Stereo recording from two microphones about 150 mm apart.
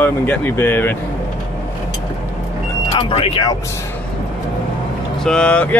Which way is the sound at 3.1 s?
40° left (ahead or behind).